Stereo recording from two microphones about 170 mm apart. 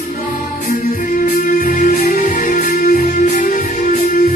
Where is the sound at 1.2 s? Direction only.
55° left (ahead or behind).